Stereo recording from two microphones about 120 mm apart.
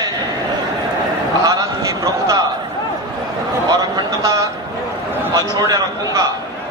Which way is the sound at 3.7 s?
25° right (ahead or behind).